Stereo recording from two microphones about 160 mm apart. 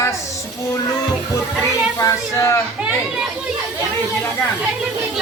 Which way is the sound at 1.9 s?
20° left (ahead or behind).